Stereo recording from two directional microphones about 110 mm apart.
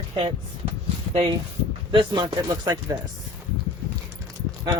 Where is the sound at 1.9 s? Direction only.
50° right (ahead or behind).